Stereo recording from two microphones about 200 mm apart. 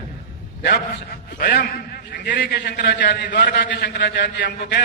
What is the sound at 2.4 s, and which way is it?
A man's voice, 55° left (ahead or behind).